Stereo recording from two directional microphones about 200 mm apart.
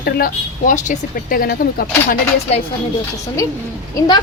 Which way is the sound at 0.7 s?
40° left (ahead or behind).